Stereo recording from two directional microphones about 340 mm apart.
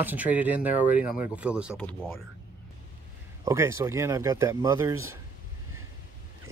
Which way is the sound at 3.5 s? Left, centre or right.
Centre.